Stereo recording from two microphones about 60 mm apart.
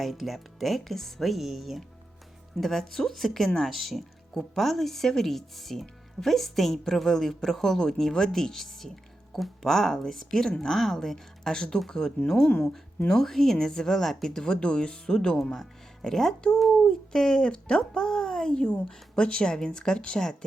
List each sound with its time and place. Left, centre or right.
0.0 s speech: centre
2.6 s speech: centre
13.1 s speech: centre